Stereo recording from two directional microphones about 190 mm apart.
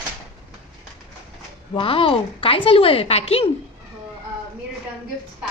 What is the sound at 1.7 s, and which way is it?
A woman's voice, 30° left (ahead or behind).